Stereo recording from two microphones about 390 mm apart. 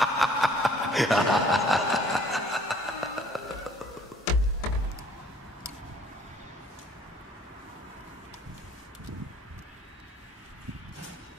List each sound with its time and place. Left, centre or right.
0.0 s chuckle: centre